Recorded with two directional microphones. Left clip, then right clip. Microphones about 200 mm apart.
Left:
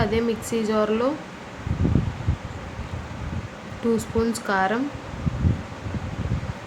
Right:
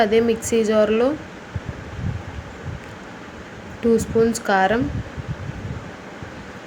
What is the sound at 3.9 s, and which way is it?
Speech, 15° right (ahead or behind).